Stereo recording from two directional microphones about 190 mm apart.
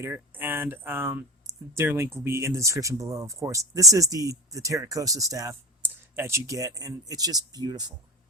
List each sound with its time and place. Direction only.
0.0 s speech: 10° right (ahead or behind)